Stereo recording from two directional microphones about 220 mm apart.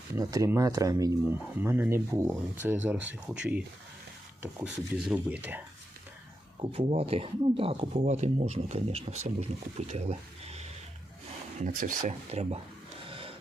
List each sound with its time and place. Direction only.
0.2 s speech: 15° right (ahead or behind)
4.6 s speech: 5° right (ahead or behind)
6.6 s speech: 25° right (ahead or behind)
11.8 s speech: 35° right (ahead or behind)
13.1 s a sound: 25° right (ahead or behind)